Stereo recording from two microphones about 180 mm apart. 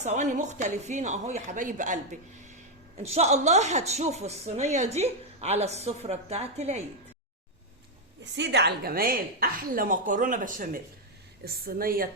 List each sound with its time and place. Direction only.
0.0 s a woman's voice: 45° right (ahead or behind)
8.2 s a woman's voice: 80° right; by 12.0 s 55° right (ahead or behind)